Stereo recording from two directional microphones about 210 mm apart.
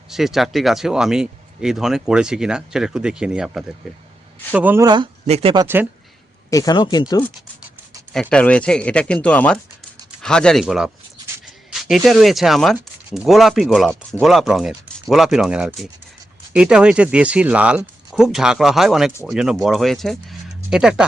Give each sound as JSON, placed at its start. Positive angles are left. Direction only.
{"t": 0.1, "sound": "speech", "side_deg": 0}
{"t": 5.2, "sound": "speech", "side_deg": -30}
{"t": 5.6, "sound": "speech", "side_deg": -10}
{"t": 6.5, "sound": "speech", "side_deg": 15}
{"t": 8.1, "sound": "speech", "side_deg": 5}